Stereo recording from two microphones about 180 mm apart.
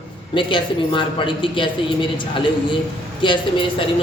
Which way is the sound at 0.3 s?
25° left (ahead or behind).